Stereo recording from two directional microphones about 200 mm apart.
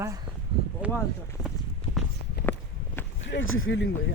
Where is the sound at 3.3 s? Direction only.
85° left.